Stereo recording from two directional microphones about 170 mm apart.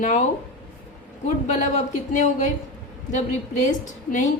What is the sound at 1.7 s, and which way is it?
Speech, 45° left (ahead or behind).